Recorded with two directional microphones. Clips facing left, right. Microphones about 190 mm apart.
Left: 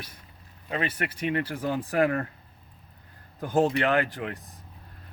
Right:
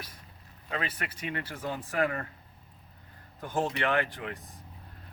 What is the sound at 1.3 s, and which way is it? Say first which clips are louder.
Speech: left 7 dB; 35° left (ahead or behind).